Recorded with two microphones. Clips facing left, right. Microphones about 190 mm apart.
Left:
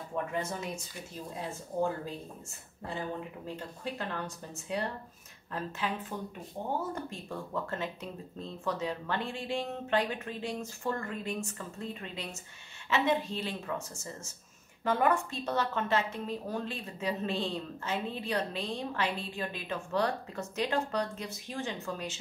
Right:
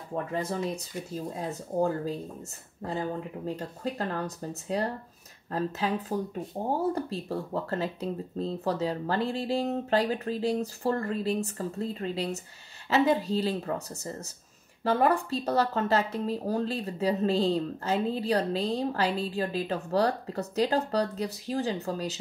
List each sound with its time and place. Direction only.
0.1 s a woman's voice: 35° right (ahead or behind)
3.4 s a woman's voice: 40° right (ahead or behind)